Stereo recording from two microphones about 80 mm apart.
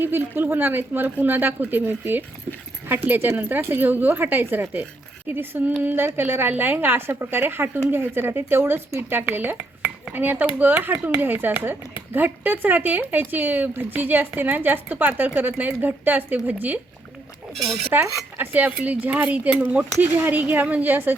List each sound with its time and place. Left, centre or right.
0.0 s speech: right
17.9 s speech: right